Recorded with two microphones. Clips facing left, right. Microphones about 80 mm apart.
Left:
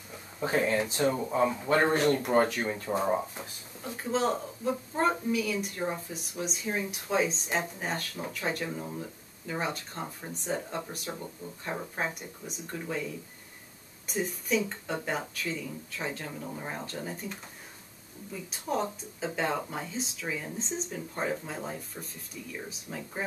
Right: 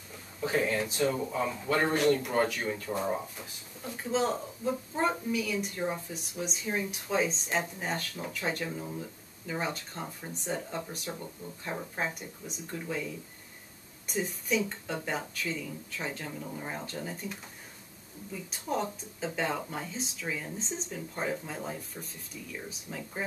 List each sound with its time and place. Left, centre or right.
0.4 s speech: left
2.8 s speech: left
3.9 s speech: centre
22.7 s speech: centre